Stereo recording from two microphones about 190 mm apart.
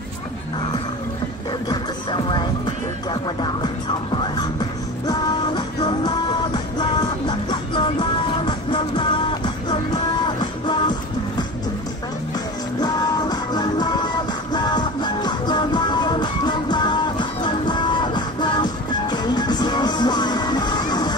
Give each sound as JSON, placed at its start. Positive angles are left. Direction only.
{"t": 1.7, "sound": "music", "side_deg": 25}
{"t": 5.0, "sound": "music", "side_deg": 20}
{"t": 12.8, "sound": "music", "side_deg": 20}